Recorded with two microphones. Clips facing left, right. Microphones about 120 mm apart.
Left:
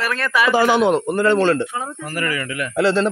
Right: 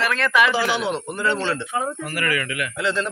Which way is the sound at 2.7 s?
35° left (ahead or behind).